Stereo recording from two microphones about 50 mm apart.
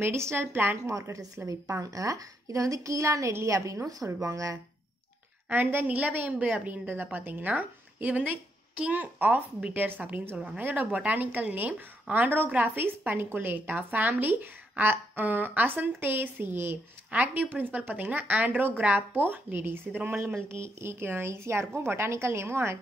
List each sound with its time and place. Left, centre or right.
0.0 s a woman's voice: right
0.8 s a woman's voice: right
2.4 s a woman's voice: right
5.5 s a woman's voice: right
12.7 s speech: right
17.1 s speech: right
18.9 s a woman's voice: right
20.3 s a woman's voice: right